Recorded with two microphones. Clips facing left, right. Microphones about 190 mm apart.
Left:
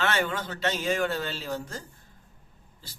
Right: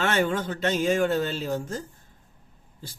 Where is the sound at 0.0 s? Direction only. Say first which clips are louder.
Right 4 dB; 50° right (ahead or behind).